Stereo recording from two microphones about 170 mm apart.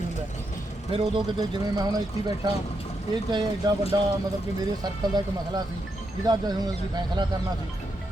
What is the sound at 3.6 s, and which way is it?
Speech, 25° right (ahead or behind).